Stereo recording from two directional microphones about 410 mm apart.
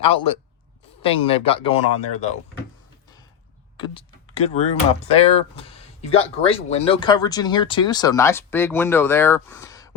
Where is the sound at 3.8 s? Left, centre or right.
Centre.